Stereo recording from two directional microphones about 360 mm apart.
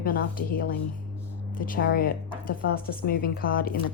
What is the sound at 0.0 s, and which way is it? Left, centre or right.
Speech, left.